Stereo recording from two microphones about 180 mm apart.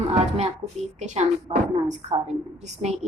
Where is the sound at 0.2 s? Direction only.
35° right (ahead or behind).